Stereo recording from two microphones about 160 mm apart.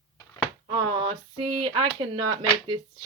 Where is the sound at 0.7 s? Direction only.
30° right (ahead or behind).